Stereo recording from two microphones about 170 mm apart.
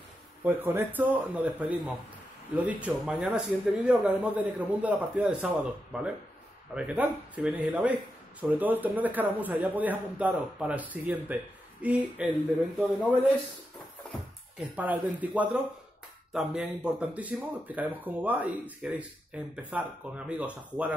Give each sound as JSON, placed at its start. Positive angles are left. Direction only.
{"t": 0.4, "sound": "speech", "side_deg": -10}
{"t": 14.8, "sound": "speech", "side_deg": -10}